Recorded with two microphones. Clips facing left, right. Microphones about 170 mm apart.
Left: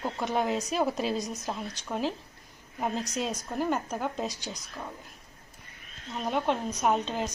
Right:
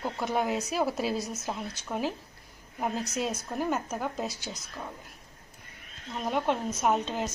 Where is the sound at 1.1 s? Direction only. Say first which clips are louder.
Even; 15° left (ahead or behind).